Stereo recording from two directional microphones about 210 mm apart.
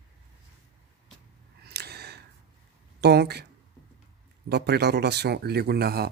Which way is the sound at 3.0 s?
50° right (ahead or behind).